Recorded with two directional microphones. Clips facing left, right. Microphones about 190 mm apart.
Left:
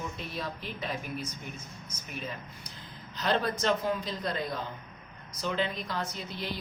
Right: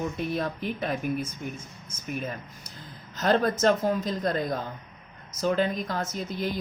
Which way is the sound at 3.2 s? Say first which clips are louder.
Right 6 dB; 45° right (ahead or behind).